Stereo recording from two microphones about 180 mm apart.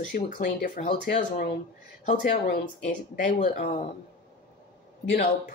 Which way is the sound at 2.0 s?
55° left (ahead or behind).